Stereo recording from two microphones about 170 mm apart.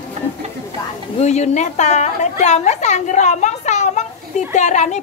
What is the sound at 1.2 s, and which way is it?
A woman's voice, 40° left (ahead or behind).